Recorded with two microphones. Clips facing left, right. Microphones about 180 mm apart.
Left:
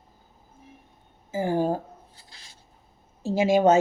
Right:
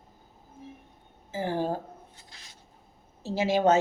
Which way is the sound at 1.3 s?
10° left (ahead or behind).